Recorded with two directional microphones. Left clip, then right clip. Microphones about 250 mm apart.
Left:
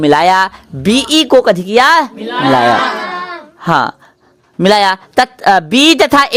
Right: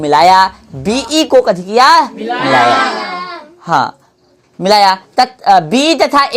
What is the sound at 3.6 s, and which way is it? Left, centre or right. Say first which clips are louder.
Speech: left 1 dB; left.